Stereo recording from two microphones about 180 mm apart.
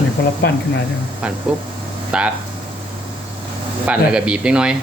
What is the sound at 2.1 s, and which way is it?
Speech, 5° right (ahead or behind).